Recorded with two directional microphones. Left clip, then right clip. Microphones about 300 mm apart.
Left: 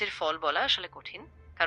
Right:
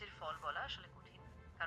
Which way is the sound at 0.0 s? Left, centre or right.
Left.